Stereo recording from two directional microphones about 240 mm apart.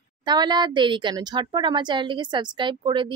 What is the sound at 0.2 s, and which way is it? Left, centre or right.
Speech, centre.